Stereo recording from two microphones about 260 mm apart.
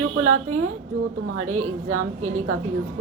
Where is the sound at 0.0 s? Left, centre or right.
Right.